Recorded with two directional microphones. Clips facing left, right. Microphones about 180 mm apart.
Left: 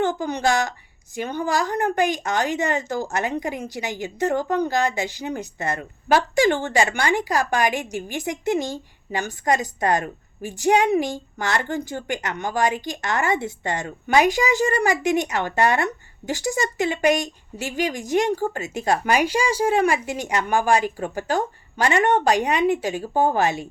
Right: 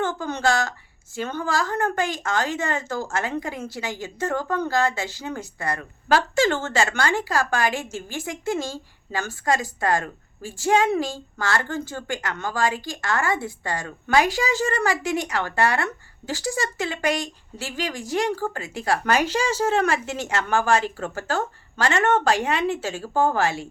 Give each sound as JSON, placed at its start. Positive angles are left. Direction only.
{"t": 0.0, "sound": "a woman's voice", "side_deg": 15}